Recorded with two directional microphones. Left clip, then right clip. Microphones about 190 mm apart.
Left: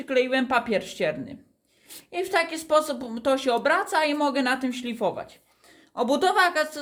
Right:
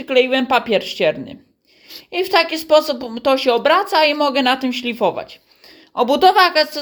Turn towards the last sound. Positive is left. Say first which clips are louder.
# right 8 dB
turn(degrees=-25)  # may be behind; listen again after turning